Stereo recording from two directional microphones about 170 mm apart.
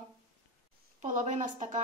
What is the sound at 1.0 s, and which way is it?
Speech, 45° right (ahead or behind).